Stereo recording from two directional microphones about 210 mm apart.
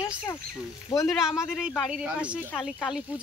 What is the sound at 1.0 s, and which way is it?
Speech, centre (ahead or behind).